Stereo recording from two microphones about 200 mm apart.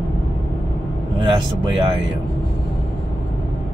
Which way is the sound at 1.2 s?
25° right (ahead or behind).